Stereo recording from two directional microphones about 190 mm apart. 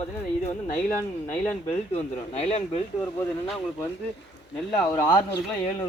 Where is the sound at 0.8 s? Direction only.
10° left (ahead or behind).